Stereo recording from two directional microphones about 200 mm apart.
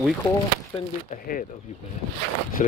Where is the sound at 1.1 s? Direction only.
45° left (ahead or behind).